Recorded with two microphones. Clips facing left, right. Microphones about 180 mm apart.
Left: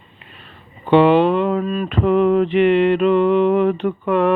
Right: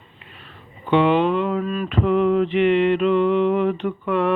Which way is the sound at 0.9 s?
75° left (ahead or behind).